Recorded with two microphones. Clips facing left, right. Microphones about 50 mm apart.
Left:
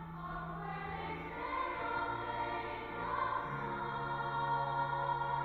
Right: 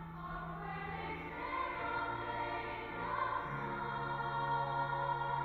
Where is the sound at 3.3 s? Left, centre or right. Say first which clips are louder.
Left 1 dB; right.